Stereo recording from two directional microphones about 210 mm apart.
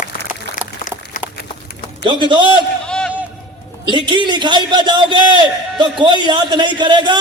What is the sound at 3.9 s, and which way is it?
A man's voice, 20° right (ahead or behind).